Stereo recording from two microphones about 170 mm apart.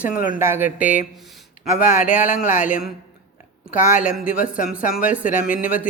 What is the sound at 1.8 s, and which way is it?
Speech, 50° left (ahead or behind).